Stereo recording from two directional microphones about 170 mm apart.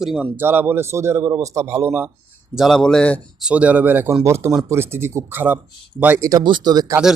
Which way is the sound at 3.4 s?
5° right (ahead or behind).